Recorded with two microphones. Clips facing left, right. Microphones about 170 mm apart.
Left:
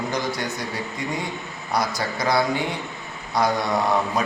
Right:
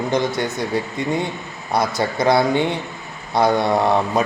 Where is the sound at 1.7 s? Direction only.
25° right (ahead or behind).